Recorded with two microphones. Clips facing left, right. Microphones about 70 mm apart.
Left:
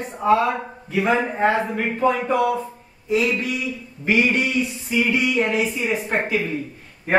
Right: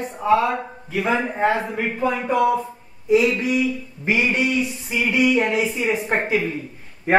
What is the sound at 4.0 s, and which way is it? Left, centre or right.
A woman's voice, right.